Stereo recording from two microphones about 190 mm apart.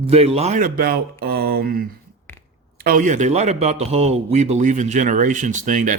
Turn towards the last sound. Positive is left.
turn(degrees=-45)  # may be behind; listen again after turning